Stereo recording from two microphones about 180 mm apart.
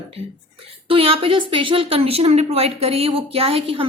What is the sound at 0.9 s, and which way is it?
A woman's voice, 30° right (ahead or behind).